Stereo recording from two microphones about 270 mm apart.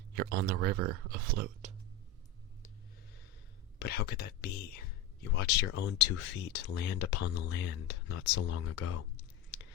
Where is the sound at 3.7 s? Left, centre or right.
Left.